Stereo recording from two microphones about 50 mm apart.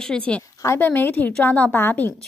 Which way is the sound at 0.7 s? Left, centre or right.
Left.